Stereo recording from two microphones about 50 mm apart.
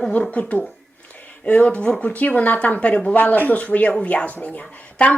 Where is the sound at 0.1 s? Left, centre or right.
Left.